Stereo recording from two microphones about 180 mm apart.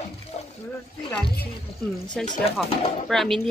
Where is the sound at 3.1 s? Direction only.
Centre (ahead or behind).